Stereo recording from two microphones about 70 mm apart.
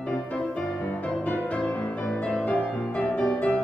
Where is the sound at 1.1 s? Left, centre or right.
Centre.